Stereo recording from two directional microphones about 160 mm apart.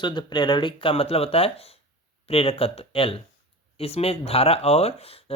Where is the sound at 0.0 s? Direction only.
30° left (ahead or behind).